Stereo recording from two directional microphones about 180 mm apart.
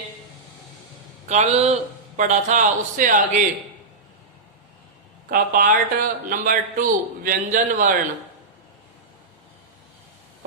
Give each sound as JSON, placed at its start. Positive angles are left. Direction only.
{"t": 1.3, "sound": "speech", "side_deg": -35}
{"t": 5.3, "sound": "speech", "side_deg": -50}